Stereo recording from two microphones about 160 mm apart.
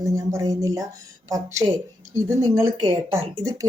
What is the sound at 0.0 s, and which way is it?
Speech, 20° right (ahead or behind).